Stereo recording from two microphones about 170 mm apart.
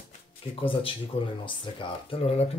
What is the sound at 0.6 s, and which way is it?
Speech, 30° left (ahead or behind).